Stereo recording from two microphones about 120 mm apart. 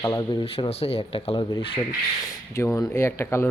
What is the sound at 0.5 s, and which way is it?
Speech, 55° left (ahead or behind).